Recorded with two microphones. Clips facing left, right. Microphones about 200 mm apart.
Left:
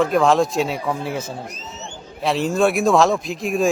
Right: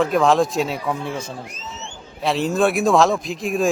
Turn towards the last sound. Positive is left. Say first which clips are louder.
# left 1 dB
turn(degrees=0)  # may be behind; listen again after turning